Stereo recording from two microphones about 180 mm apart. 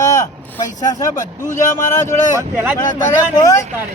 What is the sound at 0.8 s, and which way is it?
Speech, 20° left (ahead or behind).